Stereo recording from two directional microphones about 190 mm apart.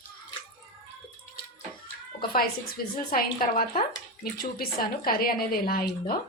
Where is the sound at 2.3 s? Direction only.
50° left (ahead or behind).